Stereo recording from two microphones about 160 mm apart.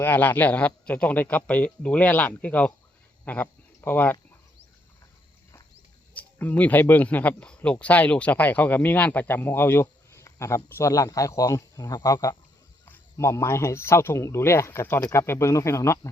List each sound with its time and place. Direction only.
0.0 s speech: 10° left (ahead or behind)
6.1 s speech: 10° left (ahead or behind)